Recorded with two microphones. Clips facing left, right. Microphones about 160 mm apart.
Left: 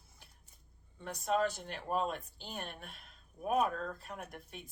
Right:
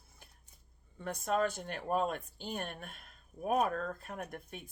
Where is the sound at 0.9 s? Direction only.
50° right (ahead or behind).